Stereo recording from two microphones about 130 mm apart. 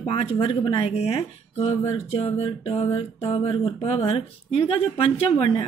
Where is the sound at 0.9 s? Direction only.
50° left (ahead or behind).